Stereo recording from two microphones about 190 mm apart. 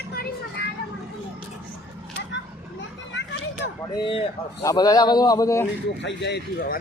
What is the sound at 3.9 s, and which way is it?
A man's voice, 25° left (ahead or behind).